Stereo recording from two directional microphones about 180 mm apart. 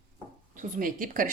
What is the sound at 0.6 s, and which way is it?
Speech, 50° right (ahead or behind).